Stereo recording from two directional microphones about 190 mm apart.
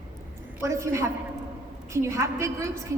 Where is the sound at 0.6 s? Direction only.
15° right (ahead or behind).